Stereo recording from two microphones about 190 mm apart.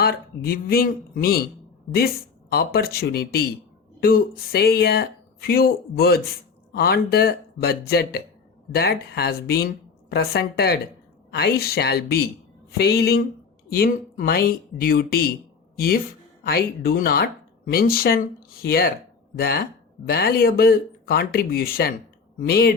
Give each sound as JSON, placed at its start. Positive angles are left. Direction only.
{"t": 0.0, "sound": "speech", "side_deg": 55}
{"t": 16.4, "sound": "speech", "side_deg": 55}